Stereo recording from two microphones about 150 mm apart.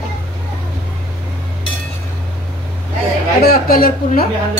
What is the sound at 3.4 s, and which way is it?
Speech, 90° left.